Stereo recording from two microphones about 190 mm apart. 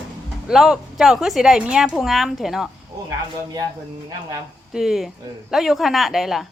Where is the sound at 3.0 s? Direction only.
20° right (ahead or behind).